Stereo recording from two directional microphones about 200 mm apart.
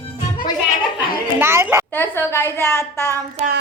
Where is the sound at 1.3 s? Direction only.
10° right (ahead or behind).